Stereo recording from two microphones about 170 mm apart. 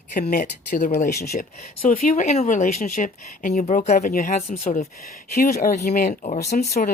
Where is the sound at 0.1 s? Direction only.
60° left (ahead or behind).